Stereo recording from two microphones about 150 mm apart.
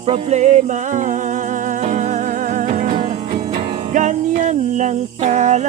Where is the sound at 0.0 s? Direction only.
45° right (ahead or behind).